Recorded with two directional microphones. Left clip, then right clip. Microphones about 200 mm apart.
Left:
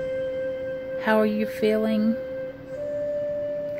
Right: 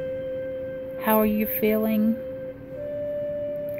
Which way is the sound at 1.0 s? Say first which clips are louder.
Even; 15° left (ahead or behind).